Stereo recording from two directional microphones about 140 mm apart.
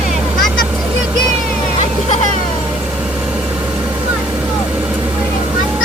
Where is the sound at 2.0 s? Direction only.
60° left (ahead or behind).